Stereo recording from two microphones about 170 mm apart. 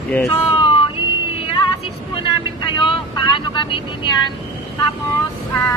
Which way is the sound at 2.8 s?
30° left (ahead or behind).